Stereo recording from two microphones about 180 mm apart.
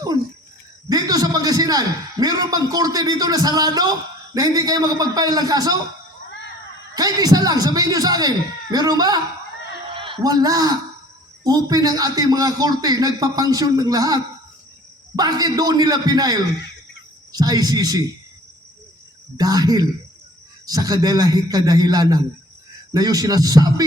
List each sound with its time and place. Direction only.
0.9 s a man's voice: 20° right (ahead or behind)
6.9 s a man's voice: 20° right (ahead or behind)
19.4 s a man's voice: 20° right (ahead or behind)